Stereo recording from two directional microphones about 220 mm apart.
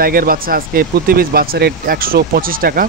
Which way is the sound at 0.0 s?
40° right (ahead or behind).